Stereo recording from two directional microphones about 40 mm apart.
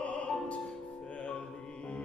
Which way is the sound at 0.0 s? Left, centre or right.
Left.